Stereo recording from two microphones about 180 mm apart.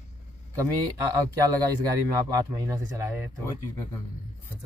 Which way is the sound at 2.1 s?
20° right (ahead or behind).